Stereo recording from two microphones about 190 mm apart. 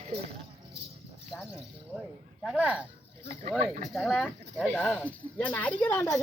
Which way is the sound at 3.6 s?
35° right (ahead or behind).